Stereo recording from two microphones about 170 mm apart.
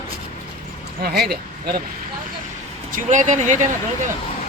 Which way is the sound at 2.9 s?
45° right (ahead or behind).